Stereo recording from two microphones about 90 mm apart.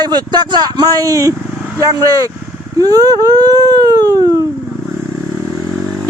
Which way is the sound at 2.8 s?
40° right (ahead or behind).